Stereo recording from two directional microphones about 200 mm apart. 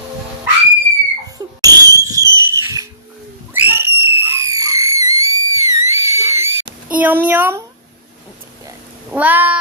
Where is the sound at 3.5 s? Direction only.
10° right (ahead or behind).